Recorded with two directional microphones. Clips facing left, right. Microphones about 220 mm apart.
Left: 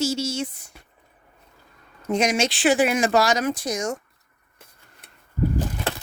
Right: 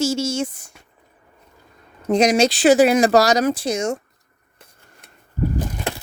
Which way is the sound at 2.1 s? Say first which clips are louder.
Right 6 dB; 35° right (ahead or behind).